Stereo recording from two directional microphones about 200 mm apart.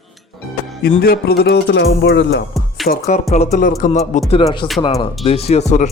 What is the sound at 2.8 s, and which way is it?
Speech, 50° left (ahead or behind).